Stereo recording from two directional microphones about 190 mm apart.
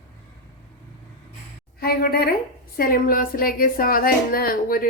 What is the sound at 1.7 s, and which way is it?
A woman's voice, 55° left (ahead or behind).